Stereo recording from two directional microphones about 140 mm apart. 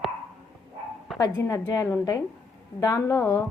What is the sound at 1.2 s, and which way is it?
A woman's voice, 25° left (ahead or behind).